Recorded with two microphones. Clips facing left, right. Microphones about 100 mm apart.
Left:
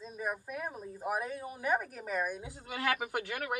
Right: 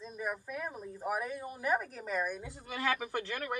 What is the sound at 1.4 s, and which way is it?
Speech, 5° left (ahead or behind).